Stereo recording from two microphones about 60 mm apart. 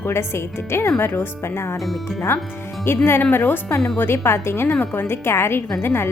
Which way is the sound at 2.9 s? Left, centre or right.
Left.